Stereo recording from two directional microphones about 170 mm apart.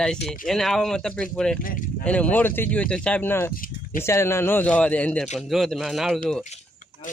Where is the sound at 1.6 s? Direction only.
55° left (ahead or behind).